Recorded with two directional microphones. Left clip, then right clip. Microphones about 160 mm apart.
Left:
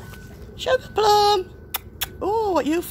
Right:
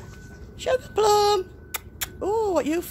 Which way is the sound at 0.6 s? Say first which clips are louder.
Left 2 dB; 5° right (ahead or behind).